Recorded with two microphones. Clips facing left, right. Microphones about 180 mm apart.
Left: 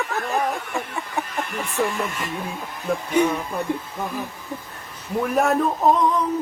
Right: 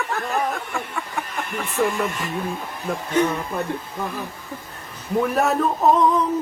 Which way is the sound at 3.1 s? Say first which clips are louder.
Even; 10° left (ahead or behind).